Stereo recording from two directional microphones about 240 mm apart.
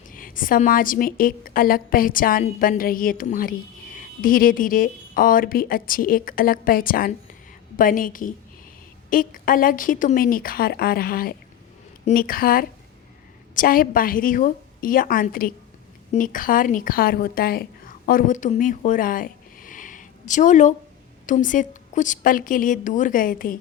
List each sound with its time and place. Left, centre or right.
0.1 s a woman's voice: left